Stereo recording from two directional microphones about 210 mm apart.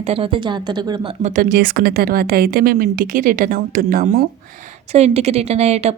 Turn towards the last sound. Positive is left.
turn(degrees=-30)  # may be behind; listen again after turning